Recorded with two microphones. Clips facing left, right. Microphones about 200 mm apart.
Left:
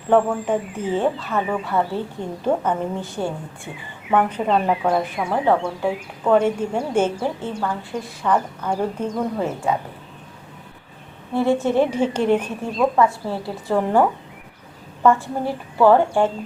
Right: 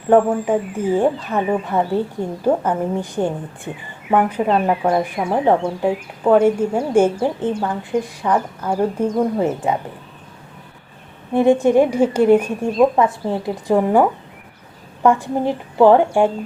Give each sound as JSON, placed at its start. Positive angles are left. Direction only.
{"t": 0.1, "sound": "a woman's voice", "side_deg": -10}
{"t": 6.3, "sound": "a woman's voice", "side_deg": -5}
{"t": 11.3, "sound": "a woman's voice", "side_deg": -15}